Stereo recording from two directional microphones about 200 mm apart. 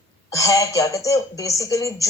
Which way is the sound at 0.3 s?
15° left (ahead or behind).